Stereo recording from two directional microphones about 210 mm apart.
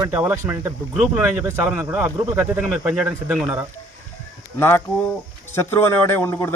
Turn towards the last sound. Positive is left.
turn(degrees=10)  # may be behind; listen again after turning